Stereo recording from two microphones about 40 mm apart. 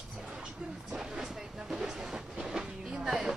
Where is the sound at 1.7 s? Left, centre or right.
Centre.